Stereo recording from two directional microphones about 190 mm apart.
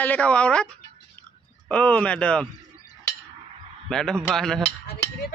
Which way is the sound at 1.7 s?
5° left (ahead or behind).